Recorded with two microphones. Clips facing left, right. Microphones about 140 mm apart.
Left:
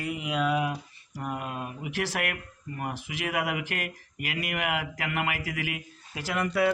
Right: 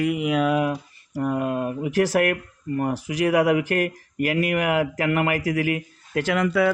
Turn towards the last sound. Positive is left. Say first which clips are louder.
# right 8 dB
turn(degrees=-90)